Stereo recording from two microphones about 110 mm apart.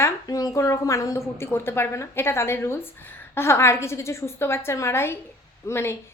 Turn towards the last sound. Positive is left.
turn(degrees=25)  # may be behind; listen again after turning